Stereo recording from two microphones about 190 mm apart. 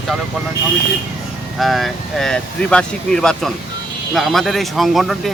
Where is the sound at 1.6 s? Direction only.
Centre (ahead or behind).